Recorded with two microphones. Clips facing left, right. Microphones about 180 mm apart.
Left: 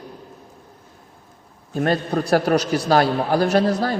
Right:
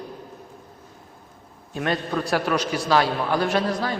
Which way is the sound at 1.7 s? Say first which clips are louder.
Left 5 dB; 40° left (ahead or behind).